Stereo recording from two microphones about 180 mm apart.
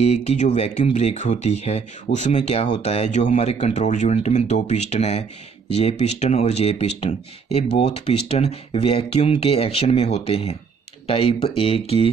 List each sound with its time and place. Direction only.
0.0 s speech: 35° left (ahead or behind)